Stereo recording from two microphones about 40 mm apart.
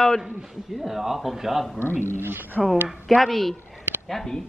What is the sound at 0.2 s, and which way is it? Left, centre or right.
A man's voice, centre.